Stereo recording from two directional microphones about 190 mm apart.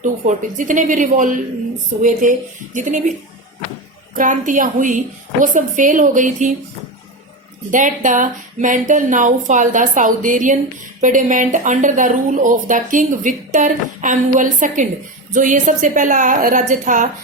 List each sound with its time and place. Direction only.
0.0 s a woman's voice: 40° right (ahead or behind)
4.1 s a woman's voice: 45° right (ahead or behind)
7.7 s a woman's voice: 45° right (ahead or behind)